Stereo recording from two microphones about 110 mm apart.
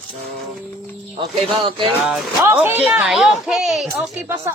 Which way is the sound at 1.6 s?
50° right (ahead or behind).